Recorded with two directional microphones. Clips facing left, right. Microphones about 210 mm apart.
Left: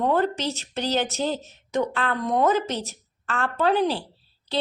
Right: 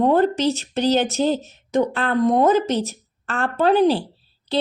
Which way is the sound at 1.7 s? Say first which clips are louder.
Right 6 dB; 40° right (ahead or behind).